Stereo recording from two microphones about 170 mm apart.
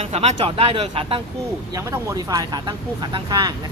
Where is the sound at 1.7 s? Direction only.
20° right (ahead or behind).